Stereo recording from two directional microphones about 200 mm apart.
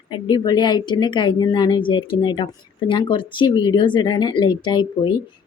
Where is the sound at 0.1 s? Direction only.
20° left (ahead or behind).